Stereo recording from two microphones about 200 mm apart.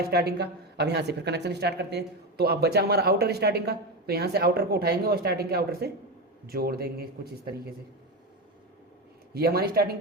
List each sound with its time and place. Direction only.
0.1 s speech: 55° right (ahead or behind)
9.3 s speech: 50° right (ahead or behind)